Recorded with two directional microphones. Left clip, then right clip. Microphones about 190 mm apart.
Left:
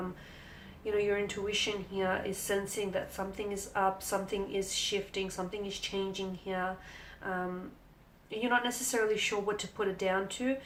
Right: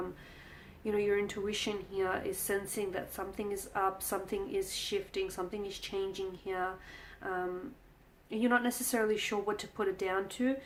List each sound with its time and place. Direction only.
0.9 s speech: 40° right (ahead or behind)